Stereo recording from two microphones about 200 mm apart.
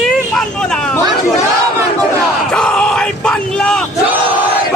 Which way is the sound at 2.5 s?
5° left (ahead or behind).